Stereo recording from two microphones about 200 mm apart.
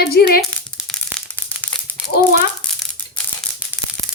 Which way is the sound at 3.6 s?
5° right (ahead or behind).